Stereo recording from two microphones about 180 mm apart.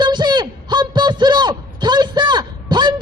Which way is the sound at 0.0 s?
25° right (ahead or behind).